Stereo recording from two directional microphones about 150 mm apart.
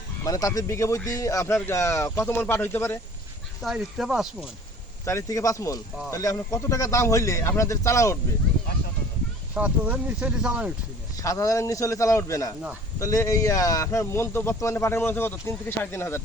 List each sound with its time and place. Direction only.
0.3 s speech: 25° left (ahead or behind)
3.6 s speech: centre (ahead or behind)
5.0 s speech: 20° left (ahead or behind)
9.6 s speech: 10° right (ahead or behind)
11.2 s speech: 20° left (ahead or behind)